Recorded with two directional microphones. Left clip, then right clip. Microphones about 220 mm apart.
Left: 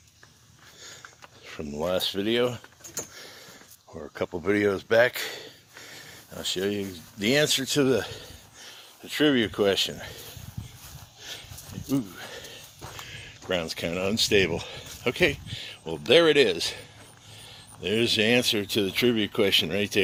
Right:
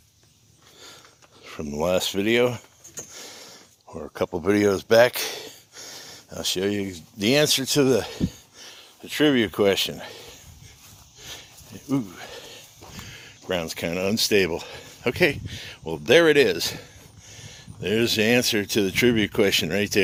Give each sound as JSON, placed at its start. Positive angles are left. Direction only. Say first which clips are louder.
{"t": 1.5, "sound": "speech", "louder": "right 4 dB", "side_deg": -35}
{"t": 11.2, "sound": "a sound", "louder": "even", "side_deg": -35}
{"t": 13.1, "sound": "speech", "louder": "right 1 dB", "side_deg": -30}